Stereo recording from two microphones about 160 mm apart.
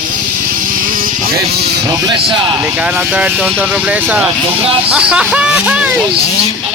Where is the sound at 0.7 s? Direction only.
60° right (ahead or behind).